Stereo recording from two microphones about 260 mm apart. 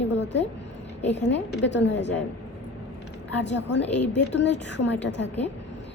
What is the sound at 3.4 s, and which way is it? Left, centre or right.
A woman's voice, left.